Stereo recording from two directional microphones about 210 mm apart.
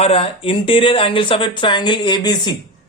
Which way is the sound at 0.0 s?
25° left (ahead or behind).